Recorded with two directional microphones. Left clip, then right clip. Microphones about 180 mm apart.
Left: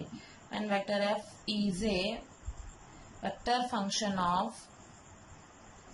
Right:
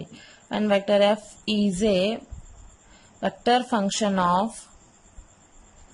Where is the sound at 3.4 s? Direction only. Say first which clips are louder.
Right 10 dB; 55° right (ahead or behind).